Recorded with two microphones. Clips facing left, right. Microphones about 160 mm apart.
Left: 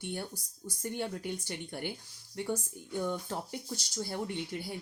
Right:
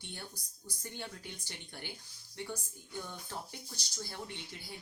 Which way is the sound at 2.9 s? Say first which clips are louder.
Left 9 dB; 55° left (ahead or behind).